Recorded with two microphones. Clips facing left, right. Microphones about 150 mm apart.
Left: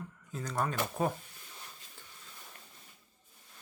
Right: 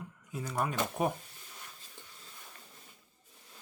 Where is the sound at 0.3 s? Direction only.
10° right (ahead or behind).